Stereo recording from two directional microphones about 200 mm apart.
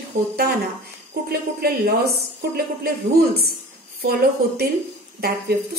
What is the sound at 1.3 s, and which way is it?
Speech, 50° right (ahead or behind).